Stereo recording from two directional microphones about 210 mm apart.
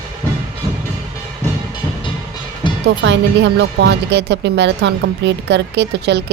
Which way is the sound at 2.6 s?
20° left (ahead or behind).